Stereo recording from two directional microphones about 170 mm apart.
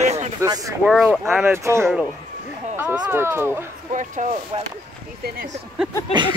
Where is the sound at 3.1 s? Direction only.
15° right (ahead or behind).